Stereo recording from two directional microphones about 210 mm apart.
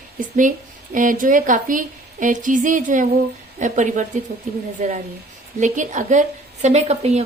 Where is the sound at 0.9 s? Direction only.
40° right (ahead or behind).